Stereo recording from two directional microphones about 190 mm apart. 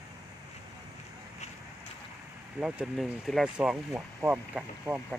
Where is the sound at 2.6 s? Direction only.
5° right (ahead or behind).